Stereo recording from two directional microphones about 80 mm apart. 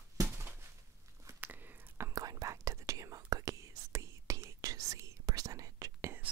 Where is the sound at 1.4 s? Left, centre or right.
Right.